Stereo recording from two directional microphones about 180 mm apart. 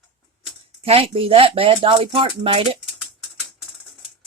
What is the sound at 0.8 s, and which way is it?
Speech, 35° right (ahead or behind).